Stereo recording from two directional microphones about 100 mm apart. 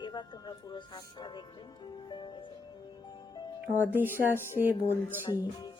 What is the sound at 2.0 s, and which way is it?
Speech, 50° left (ahead or behind).